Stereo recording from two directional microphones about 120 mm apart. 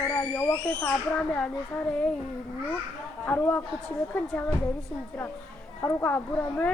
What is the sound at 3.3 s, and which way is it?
A woman's voice, 15° left (ahead or behind).